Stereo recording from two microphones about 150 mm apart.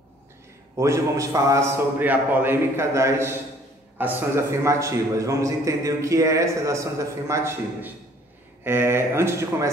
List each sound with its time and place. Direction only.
0.7 s a man's voice: 20° right (ahead or behind)